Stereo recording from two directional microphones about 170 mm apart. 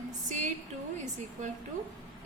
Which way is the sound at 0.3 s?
45° right (ahead or behind).